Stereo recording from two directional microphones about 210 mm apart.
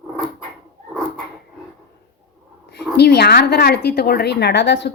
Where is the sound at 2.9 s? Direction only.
50° left (ahead or behind).